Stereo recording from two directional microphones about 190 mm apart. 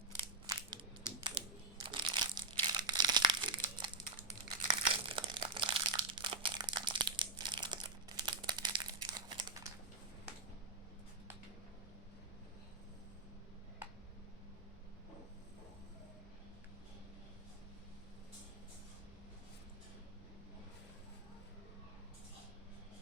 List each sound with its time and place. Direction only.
0.4 s crushing: 20° right (ahead or behind)
4.7 s crumpling: 25° right (ahead or behind)